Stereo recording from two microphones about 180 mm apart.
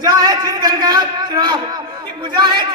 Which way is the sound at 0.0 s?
20° right (ahead or behind).